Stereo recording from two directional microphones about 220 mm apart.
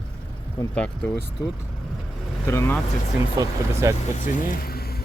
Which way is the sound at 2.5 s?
15° left (ahead or behind).